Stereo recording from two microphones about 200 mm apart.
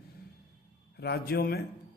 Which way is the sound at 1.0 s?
55° left (ahead or behind).